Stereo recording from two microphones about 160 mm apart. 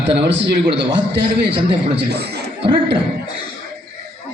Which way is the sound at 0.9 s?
30° right (ahead or behind).